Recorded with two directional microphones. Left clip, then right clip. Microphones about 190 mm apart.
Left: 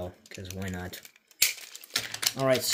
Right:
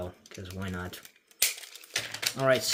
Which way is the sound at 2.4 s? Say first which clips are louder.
Right 1 dB; 10° left (ahead or behind).